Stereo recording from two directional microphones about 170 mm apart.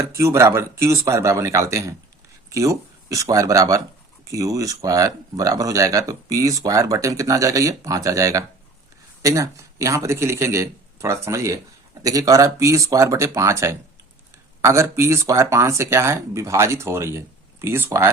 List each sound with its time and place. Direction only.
0.0 s speech: 15° right (ahead or behind)